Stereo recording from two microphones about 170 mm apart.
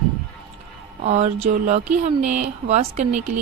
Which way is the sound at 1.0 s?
40° right (ahead or behind).